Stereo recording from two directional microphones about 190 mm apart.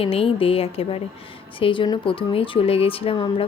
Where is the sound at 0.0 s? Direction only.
30° left (ahead or behind).